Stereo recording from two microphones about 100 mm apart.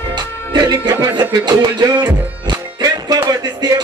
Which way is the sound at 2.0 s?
45° right (ahead or behind).